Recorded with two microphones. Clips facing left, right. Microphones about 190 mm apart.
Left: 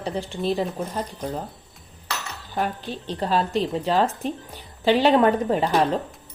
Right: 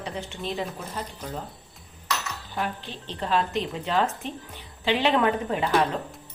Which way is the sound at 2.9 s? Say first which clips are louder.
Left 2 dB; 40° left (ahead or behind).